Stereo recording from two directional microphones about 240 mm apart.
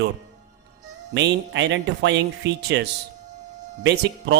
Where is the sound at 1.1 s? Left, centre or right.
Right.